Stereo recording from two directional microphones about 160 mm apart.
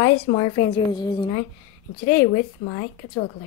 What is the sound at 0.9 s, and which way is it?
Speech, 25° left (ahead or behind).